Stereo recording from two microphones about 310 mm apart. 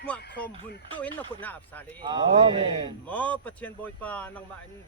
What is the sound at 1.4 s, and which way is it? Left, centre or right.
Speech, centre.